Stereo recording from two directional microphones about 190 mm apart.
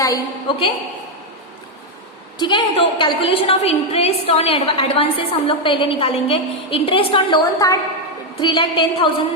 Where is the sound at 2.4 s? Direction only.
25° left (ahead or behind).